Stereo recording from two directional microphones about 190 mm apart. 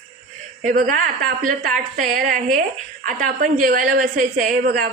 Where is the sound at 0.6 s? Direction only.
45° right (ahead or behind).